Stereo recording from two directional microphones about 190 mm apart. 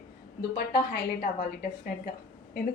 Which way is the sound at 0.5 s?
55° left (ahead or behind).